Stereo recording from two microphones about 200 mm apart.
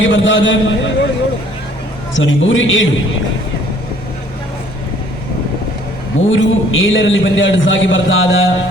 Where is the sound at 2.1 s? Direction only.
75° left (ahead or behind).